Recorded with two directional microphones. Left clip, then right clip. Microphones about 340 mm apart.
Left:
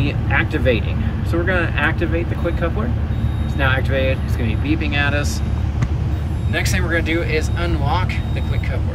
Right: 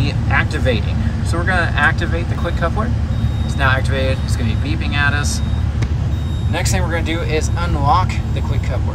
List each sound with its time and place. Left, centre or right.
0.0 s speech: centre
6.5 s speech: centre